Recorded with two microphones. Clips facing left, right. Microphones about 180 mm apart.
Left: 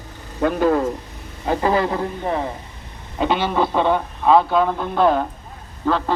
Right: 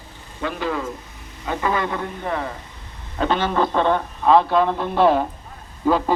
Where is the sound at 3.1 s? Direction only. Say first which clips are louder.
Left 1 dB; 10° left (ahead or behind).